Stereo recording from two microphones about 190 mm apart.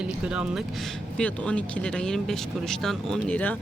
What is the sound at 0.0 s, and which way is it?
Speech, 5° right (ahead or behind).